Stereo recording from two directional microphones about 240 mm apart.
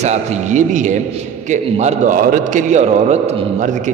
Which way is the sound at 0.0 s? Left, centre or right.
Right.